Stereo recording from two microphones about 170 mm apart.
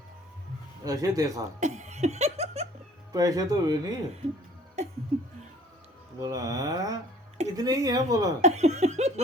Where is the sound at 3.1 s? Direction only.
20° right (ahead or behind).